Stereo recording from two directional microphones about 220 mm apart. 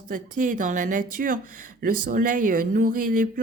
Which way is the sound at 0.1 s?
35° right (ahead or behind).